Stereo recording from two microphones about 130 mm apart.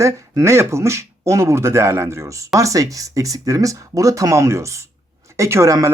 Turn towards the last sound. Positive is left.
turn(degrees=-25)  # may be behind; listen again after turning